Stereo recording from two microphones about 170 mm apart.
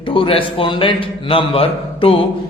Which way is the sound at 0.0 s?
30° left (ahead or behind).